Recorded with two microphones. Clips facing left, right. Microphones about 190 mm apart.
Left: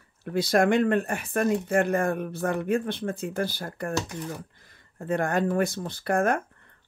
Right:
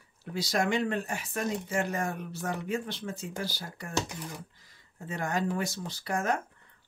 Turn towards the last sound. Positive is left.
turn(degrees=55)  # may be behind; listen again after turning